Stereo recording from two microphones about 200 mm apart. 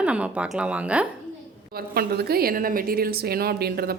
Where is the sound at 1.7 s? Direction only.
50° right (ahead or behind).